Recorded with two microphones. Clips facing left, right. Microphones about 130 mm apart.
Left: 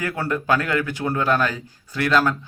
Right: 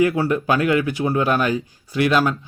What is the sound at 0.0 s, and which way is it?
Speech, 15° right (ahead or behind).